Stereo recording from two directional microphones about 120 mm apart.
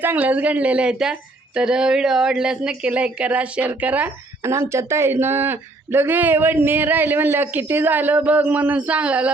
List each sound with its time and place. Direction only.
0.0 s speech: 15° right (ahead or behind)
4.4 s speech: 25° right (ahead or behind)